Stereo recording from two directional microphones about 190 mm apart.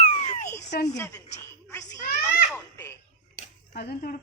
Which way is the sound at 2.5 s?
10° left (ahead or behind).